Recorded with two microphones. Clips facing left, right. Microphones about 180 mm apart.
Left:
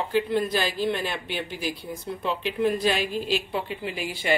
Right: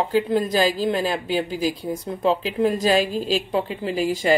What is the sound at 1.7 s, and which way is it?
A woman's voice, 45° right (ahead or behind).